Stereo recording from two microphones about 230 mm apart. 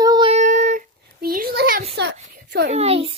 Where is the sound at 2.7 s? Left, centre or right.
Right.